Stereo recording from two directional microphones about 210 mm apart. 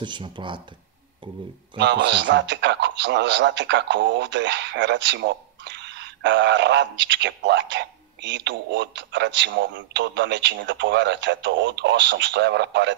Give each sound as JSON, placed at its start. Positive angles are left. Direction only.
{"t": 0.0, "sound": "speech", "side_deg": -20}
{"t": 1.8, "sound": "a man's voice", "side_deg": -55}